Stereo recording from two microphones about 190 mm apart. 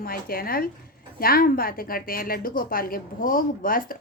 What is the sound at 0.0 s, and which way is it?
Speech, 50° left (ahead or behind).